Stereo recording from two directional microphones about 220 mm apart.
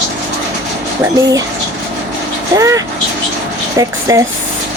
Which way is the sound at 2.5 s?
15° right (ahead or behind).